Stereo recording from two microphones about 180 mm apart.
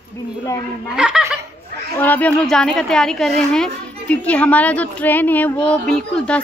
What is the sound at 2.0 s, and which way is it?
A woman's voice, 10° left (ahead or behind).